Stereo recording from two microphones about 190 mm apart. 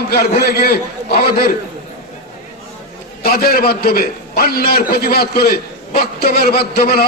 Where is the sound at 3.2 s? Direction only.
50° left (ahead or behind).